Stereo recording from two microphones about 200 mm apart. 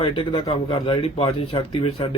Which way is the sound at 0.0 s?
25° left (ahead or behind).